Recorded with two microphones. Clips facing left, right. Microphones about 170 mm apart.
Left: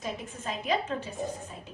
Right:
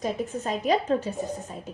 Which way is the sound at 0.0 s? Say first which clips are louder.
Right 8 dB; 40° right (ahead or behind).